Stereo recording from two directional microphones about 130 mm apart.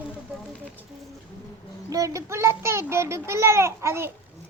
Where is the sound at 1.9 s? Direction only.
25° right (ahead or behind).